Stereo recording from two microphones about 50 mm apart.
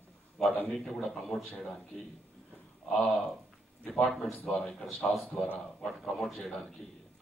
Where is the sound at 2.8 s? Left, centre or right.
Left.